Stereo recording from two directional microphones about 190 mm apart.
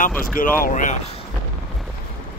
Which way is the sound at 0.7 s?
45° left (ahead or behind).